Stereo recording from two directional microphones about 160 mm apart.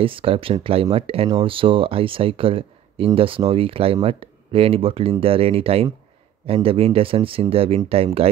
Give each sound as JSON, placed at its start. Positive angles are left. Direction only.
{"t": 0.0, "sound": "speech", "side_deg": -35}